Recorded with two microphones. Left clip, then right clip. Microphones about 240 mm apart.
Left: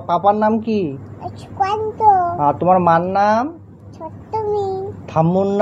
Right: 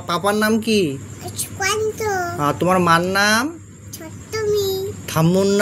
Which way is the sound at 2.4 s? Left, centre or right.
Right.